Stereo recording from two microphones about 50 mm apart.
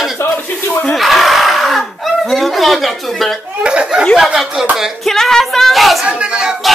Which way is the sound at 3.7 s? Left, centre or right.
Centre.